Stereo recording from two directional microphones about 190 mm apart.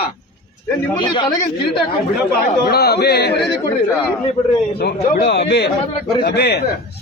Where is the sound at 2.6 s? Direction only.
55° left (ahead or behind).